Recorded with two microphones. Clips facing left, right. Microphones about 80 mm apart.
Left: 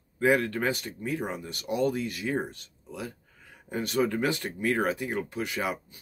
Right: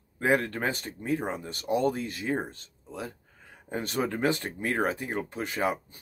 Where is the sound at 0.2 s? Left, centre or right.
Right.